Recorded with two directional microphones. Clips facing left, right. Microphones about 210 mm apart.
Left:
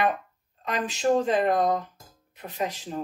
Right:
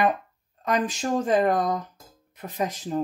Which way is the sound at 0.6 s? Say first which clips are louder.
Left 1 dB; 45° right (ahead or behind).